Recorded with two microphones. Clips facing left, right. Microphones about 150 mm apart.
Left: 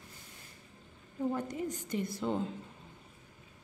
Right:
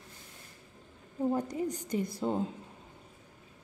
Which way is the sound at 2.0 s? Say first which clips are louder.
Right 2 dB; 10° right (ahead or behind).